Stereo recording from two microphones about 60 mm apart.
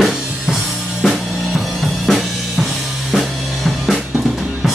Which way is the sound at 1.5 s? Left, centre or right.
Centre.